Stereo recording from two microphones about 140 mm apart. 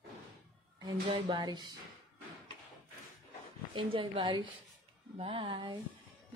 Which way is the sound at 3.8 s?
35° right (ahead or behind).